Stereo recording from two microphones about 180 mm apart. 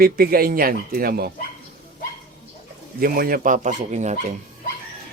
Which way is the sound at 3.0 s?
55° right (ahead or behind).